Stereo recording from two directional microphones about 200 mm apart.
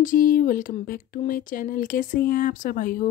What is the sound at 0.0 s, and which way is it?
Speech, 45° left (ahead or behind).